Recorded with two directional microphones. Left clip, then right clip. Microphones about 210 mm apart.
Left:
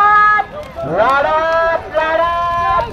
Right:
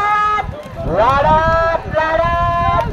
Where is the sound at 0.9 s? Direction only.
20° right (ahead or behind); by 2.5 s centre (ahead or behind).